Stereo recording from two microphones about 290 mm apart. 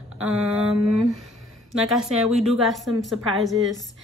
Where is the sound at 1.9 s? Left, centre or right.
Centre.